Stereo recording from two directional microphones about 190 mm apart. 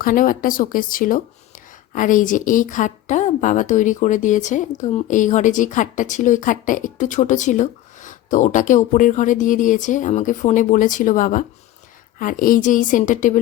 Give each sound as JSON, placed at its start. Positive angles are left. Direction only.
{"t": 0.0, "sound": "a woman's voice", "side_deg": 45}